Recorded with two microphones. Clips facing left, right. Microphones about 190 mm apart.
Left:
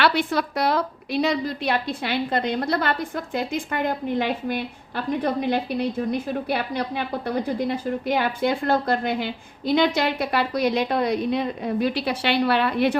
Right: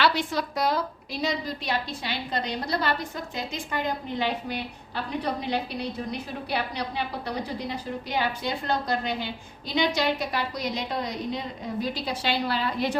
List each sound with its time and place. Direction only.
0.0 s a woman's voice: 60° left (ahead or behind)